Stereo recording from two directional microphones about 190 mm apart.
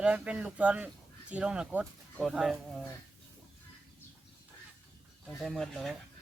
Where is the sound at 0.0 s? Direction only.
5° right (ahead or behind).